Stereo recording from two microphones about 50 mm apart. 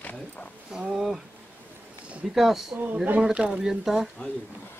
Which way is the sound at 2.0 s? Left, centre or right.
Right.